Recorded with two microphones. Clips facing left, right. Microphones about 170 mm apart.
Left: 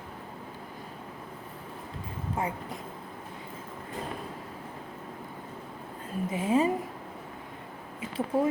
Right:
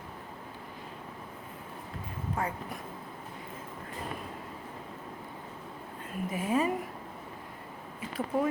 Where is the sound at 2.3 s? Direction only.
20° left (ahead or behind).